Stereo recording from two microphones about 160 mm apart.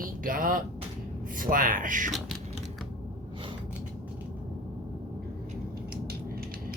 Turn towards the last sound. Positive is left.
turn(degrees=-70)  # may be behind; listen again after turning